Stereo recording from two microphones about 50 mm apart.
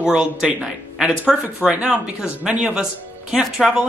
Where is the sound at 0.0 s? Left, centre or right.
Centre.